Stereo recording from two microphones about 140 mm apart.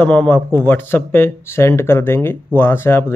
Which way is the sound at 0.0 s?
10° left (ahead or behind).